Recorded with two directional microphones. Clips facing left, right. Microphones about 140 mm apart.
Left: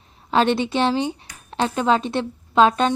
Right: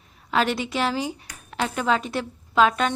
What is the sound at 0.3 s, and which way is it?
A woman's voice, 30° left (ahead or behind).